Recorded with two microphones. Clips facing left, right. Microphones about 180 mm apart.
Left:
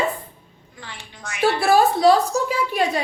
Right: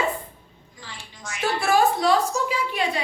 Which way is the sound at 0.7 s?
65° left (ahead or behind).